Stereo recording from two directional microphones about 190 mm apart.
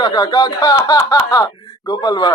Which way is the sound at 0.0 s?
20° left (ahead or behind).